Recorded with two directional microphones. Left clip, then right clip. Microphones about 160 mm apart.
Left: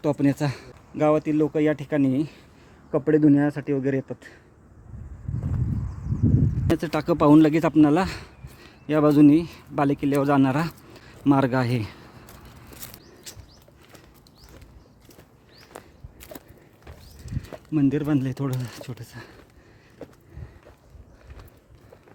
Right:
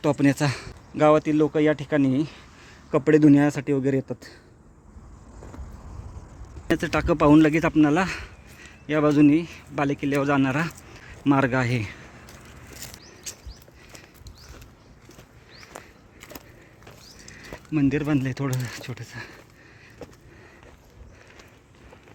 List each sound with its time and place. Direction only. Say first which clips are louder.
0.0 s speech: right 2 dB; centre (ahead or behind)
2.9 s speech: right 2 dB; 10° right (ahead or behind)
6.7 s speech: right 1 dB; 10° left (ahead or behind)
8.6 s a man's voice: left 2 dB; 30° left (ahead or behind)
13.3 s a sound: right 4 dB; 10° left (ahead or behind)
15.7 s a sound: even; 15° left (ahead or behind)
17.3 s speech: left 1 dB; 20° left (ahead or behind)